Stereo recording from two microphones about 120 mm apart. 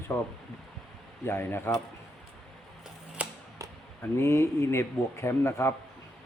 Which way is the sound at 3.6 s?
30° right (ahead or behind).